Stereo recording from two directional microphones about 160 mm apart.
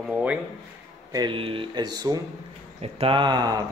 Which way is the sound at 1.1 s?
25° right (ahead or behind).